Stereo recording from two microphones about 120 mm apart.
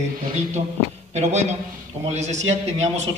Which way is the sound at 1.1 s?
70° right (ahead or behind).